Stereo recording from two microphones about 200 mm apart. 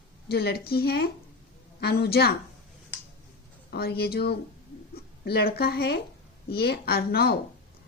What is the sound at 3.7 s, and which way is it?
A woman's voice, 50° left (ahead or behind).